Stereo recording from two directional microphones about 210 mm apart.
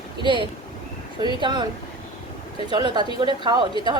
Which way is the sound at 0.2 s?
25° right (ahead or behind).